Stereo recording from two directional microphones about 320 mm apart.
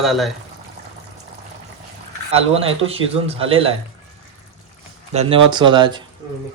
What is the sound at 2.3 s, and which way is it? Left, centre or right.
A man's voice, centre.